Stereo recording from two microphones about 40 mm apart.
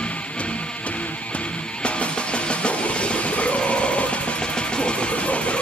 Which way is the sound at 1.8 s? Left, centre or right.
Left.